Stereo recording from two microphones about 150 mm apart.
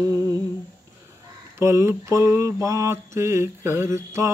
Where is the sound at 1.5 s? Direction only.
20° right (ahead or behind).